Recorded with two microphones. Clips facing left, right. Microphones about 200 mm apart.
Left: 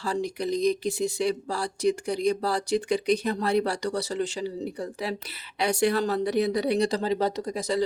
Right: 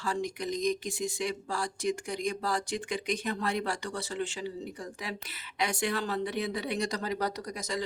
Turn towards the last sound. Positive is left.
turn(degrees=35)  # may be behind; listen again after turning